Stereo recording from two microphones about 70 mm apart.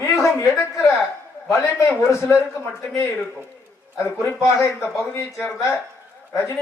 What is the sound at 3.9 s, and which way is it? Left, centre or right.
Speech, left.